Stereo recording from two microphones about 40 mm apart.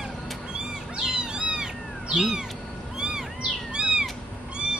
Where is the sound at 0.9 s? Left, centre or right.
Right.